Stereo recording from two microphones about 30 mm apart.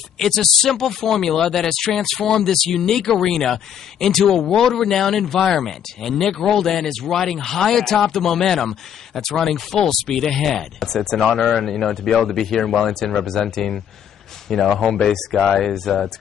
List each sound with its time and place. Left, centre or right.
0.2 s speech: centre